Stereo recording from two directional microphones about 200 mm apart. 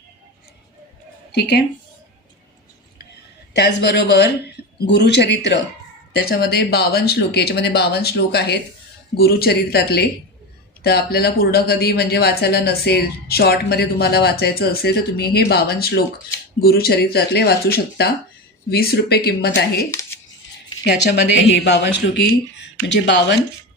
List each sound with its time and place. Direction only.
1.3 s speech: 55° left (ahead or behind)
3.5 s speech: 55° left (ahead or behind)